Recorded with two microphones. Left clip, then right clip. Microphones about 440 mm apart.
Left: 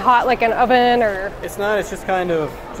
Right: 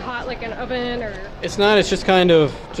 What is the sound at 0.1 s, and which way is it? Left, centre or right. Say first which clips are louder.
Speech: left 15 dB; left.